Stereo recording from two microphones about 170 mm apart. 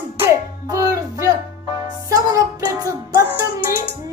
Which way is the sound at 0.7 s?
20° right (ahead or behind).